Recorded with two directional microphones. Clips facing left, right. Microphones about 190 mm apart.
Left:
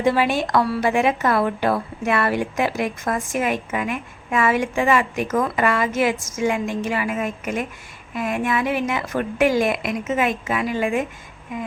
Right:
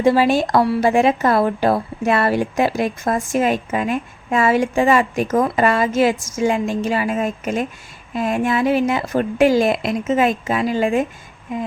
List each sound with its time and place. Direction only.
0.0 s speech: 35° right (ahead or behind)